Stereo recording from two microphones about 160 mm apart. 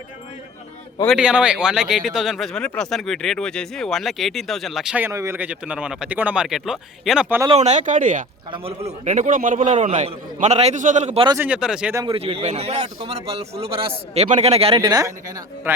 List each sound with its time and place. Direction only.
1.0 s speech: 5° right (ahead or behind)
7.4 s a man's voice: 40° right (ahead or behind)
8.5 s a man's voice: 40° right (ahead or behind)
11.3 s speech: 10° right (ahead or behind)
12.0 s a man's voice: 35° right (ahead or behind)
14.8 s speech: 20° right (ahead or behind)